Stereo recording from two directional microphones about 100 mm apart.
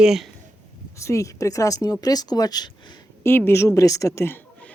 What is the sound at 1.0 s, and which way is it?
Speech, 30° left (ahead or behind).